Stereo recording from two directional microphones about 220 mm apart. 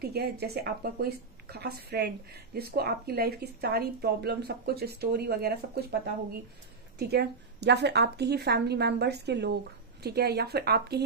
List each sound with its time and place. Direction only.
0.0 s a woman's voice: 45° right (ahead or behind)